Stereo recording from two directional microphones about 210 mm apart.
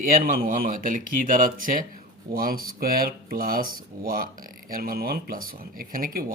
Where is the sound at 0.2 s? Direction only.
40° right (ahead or behind).